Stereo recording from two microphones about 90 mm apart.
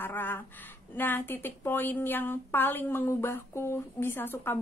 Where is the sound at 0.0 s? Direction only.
25° left (ahead or behind).